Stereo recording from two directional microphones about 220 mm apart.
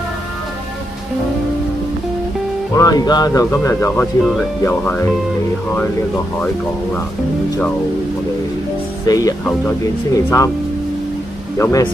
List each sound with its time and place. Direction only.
2.7 s speech: 15° left (ahead or behind)
9.0 s speech: 15° left (ahead or behind)
11.5 s speech: 15° left (ahead or behind)